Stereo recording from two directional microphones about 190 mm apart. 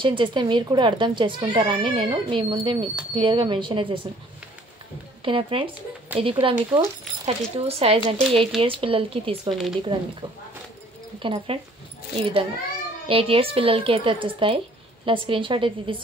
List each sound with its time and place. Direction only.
0.0 s speech: 25° right (ahead or behind)
5.2 s speech: 25° right (ahead or behind)
6.1 s speech: 10° right (ahead or behind)
6.7 s speech: 25° right (ahead or behind)
9.5 s speech: centre (ahead or behind)
11.2 s speech: 30° right (ahead or behind)